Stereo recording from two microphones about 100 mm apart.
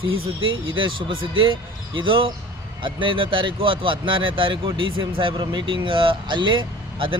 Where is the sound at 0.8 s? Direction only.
60° right (ahead or behind).